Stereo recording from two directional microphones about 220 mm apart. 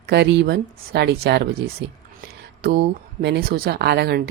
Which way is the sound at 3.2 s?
45° right (ahead or behind).